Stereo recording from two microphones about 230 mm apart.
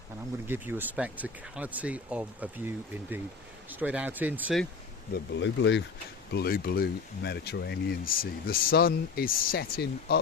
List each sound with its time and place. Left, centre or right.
0.4 s speech: centre
5.1 s speech: left